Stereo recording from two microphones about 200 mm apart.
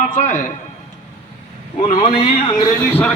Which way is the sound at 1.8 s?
35° left (ahead or behind).